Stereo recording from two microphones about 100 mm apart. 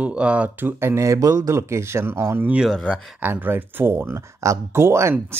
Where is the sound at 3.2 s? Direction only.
20° right (ahead or behind).